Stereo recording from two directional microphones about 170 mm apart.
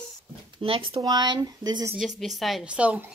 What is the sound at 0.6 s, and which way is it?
Speech, 30° right (ahead or behind).